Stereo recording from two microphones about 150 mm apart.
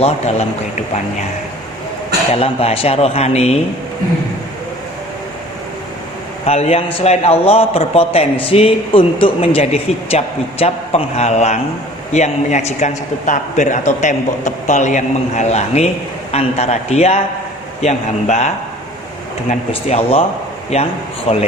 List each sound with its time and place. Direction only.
0.0 s a man's voice: 45° left (ahead or behind)
2.3 s a man's voice: 40° left (ahead or behind)
6.4 s a man's voice: 45° left (ahead or behind)